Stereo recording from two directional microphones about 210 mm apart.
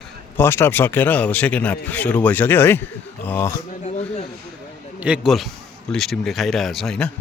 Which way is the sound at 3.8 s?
30° left (ahead or behind).